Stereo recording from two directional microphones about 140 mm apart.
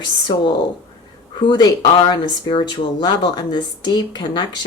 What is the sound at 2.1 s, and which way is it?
Speech, 35° left (ahead or behind).